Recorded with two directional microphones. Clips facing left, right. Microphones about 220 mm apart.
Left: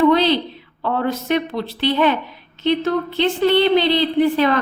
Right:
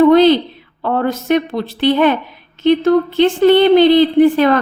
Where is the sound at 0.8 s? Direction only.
50° right (ahead or behind).